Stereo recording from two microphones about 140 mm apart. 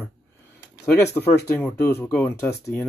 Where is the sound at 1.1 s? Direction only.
15° left (ahead or behind).